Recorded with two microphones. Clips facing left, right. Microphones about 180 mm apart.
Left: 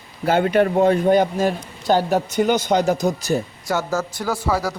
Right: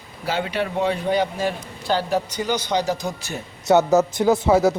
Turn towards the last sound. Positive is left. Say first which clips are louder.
# right 6 dB
turn(degrees=-20)  # may be behind; listen again after turning